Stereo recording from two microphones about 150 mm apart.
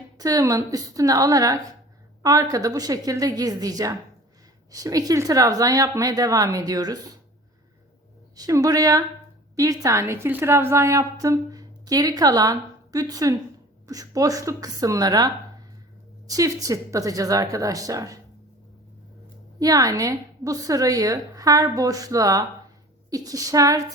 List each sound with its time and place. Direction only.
0.2 s a woman's voice: 25° right (ahead or behind)
8.4 s a woman's voice: 25° right (ahead or behind)
16.3 s a woman's voice: 25° right (ahead or behind)
19.5 s a woman's voice: 25° right (ahead or behind)